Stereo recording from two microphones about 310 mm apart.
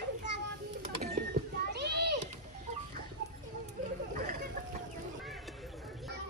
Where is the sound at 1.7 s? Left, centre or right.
Right.